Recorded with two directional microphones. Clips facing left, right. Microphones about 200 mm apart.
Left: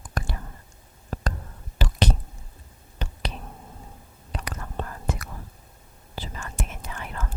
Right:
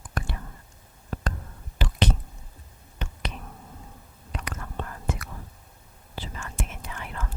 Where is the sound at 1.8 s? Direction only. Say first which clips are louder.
Left 1 dB; 40° left (ahead or behind).